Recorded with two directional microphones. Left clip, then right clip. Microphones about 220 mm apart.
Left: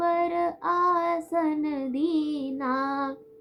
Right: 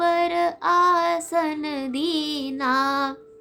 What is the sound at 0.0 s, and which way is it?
Child singing, 25° right (ahead or behind).